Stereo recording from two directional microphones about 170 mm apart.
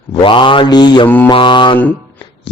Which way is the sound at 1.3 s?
30° left (ahead or behind).